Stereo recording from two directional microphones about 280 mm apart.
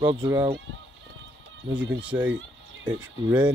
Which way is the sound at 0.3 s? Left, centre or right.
Centre.